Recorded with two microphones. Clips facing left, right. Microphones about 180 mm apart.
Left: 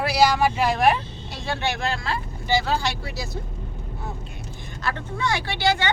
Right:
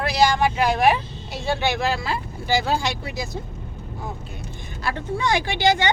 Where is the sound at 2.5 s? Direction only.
10° right (ahead or behind).